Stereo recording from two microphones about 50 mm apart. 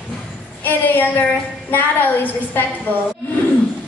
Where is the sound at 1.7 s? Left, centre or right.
Left.